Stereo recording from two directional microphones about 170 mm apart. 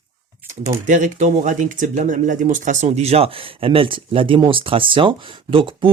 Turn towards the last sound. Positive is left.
turn(degrees=-30)  # may be behind; listen again after turning